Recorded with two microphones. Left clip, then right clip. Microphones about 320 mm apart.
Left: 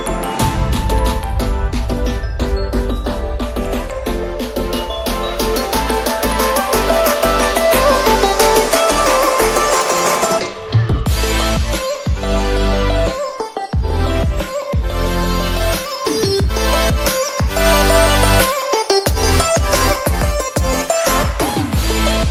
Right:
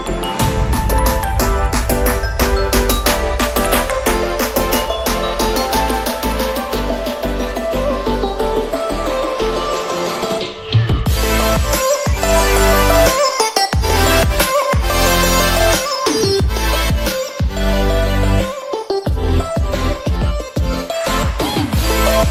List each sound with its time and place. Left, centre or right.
2.4 s music: right
5.4 s music: centre
7.7 s music: left
14.0 s music: right
16.0 s music: centre
18.1 s music: left